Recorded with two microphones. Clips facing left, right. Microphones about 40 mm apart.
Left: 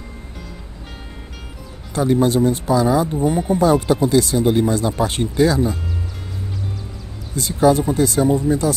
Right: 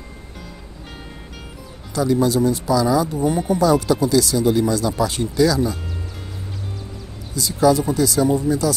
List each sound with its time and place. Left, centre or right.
2.0 s speech: left
7.3 s speech: left